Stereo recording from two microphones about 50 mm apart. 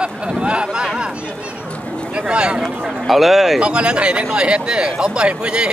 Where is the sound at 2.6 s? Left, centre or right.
Centre.